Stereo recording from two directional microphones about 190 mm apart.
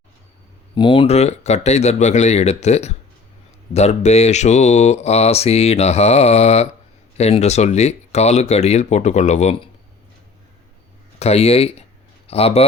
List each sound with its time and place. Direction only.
0.8 s speech: 25° left (ahead or behind)
11.2 s speech: 30° left (ahead or behind)